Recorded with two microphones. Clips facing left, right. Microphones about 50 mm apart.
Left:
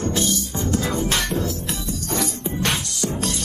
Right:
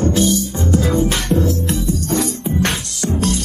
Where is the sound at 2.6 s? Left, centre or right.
Right.